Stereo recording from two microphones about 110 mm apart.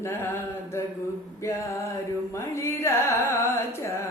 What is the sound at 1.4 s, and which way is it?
Music, 25° left (ahead or behind).